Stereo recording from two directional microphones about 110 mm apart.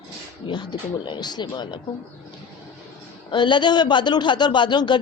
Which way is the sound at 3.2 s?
45° left (ahead or behind).